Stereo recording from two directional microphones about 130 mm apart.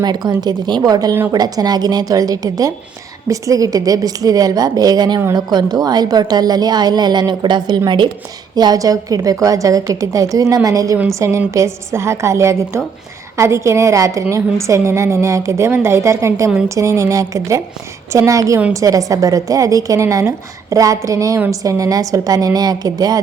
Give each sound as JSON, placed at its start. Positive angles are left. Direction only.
{"t": 0.0, "sound": "a woman's voice", "side_deg": -35}